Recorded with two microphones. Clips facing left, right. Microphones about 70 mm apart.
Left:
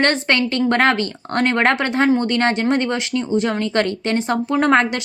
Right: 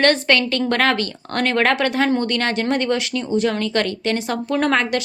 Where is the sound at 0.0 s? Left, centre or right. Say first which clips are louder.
Right 1 dB; left.